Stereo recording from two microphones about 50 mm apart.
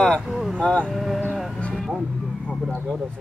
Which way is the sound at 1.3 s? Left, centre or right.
Centre.